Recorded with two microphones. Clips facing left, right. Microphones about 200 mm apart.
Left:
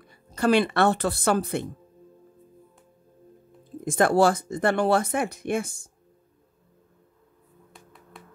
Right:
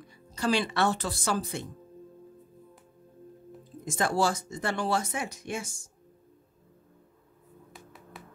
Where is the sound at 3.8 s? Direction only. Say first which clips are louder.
Left 7 dB; 55° left (ahead or behind).